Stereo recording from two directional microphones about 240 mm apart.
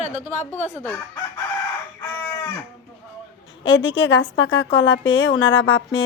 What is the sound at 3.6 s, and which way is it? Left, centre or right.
Speech, left.